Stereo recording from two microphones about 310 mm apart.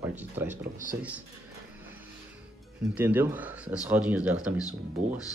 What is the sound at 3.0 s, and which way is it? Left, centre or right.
Speech, centre.